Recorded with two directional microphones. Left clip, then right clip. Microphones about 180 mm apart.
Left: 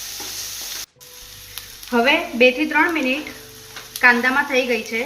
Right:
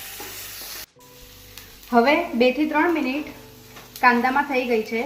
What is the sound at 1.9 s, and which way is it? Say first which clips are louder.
Speech: left 1 dB; 55° right (ahead or behind).